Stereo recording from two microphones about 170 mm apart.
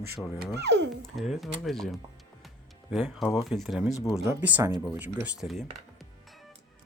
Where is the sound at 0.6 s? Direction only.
90° right.